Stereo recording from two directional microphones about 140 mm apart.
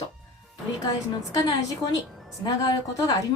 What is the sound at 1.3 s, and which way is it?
A woman's voice, 25° left (ahead or behind).